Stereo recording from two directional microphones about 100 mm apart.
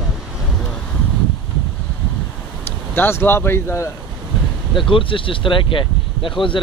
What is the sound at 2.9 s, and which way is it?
Speech, 20° left (ahead or behind).